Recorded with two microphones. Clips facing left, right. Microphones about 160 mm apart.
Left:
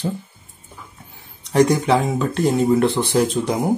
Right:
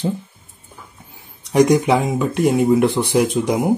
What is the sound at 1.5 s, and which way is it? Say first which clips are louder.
Speech: right 2 dB; 15° right (ahead or behind).